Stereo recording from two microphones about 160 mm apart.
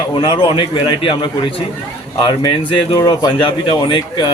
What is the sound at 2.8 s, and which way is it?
A man's voice, 25° left (ahead or behind).